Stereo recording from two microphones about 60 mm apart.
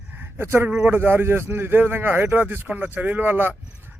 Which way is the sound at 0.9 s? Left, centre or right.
Right.